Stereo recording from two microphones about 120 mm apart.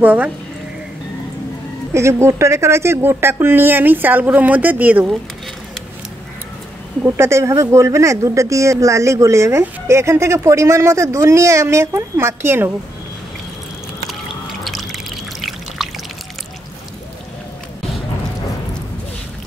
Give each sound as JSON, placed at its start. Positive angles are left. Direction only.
{"t": 0.0, "sound": "speech", "side_deg": -15}
{"t": 2.0, "sound": "speech", "side_deg": -25}
{"t": 7.2, "sound": "speech", "side_deg": -25}
{"t": 14.6, "sound": "music", "side_deg": 0}
{"t": 15.8, "sound": "a sound", "side_deg": 0}